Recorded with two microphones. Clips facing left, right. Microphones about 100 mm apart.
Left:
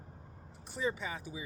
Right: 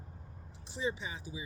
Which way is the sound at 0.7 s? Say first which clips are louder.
Left 1 dB; 50° left (ahead or behind).